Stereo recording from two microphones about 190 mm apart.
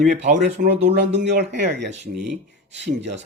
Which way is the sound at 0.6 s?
50° right (ahead or behind).